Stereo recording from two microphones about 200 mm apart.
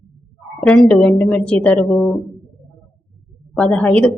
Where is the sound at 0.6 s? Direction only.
5° left (ahead or behind).